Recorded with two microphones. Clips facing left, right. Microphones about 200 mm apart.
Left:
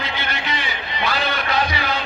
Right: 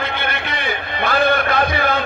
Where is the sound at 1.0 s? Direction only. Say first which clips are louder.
Right 7 dB; 55° right (ahead or behind).